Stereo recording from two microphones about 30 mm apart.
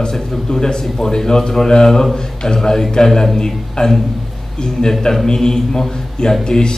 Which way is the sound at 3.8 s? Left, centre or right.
Left.